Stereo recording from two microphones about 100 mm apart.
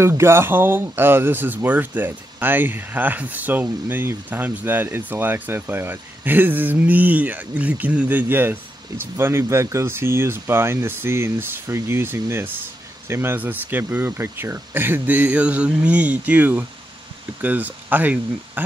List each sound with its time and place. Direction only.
0.0 s speech: 25° right (ahead or behind)